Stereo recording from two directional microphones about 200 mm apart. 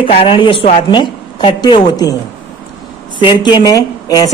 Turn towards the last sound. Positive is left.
turn(degrees=20)  # may be behind; listen again after turning